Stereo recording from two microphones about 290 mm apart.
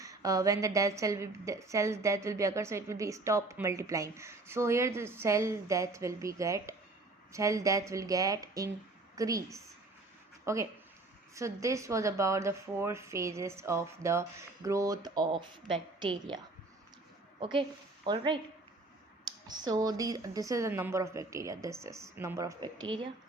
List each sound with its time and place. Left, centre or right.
0.0 s a woman's voice: centre
17.4 s a woman's voice: centre
19.5 s a woman's voice: centre